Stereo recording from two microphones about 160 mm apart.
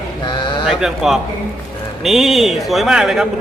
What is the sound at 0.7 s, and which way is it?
A man's voice, centre (ahead or behind).